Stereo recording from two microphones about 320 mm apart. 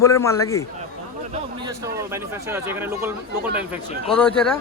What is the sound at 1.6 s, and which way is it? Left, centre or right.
Speech, centre.